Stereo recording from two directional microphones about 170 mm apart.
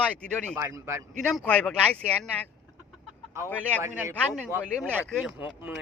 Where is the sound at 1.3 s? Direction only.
5° left (ahead or behind).